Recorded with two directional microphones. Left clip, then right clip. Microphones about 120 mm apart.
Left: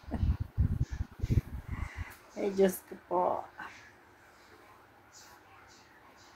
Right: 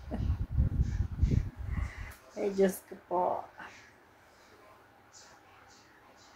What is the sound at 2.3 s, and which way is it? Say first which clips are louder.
Speech: even; 5° right (ahead or behind).